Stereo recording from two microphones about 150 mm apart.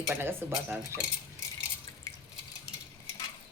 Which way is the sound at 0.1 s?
15° right (ahead or behind).